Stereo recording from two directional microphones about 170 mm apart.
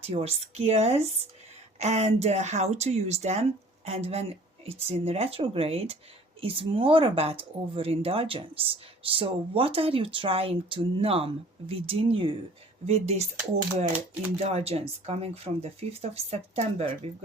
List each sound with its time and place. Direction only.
0.0 s speech: 35° right (ahead or behind)
14.3 s speech: 40° right (ahead or behind)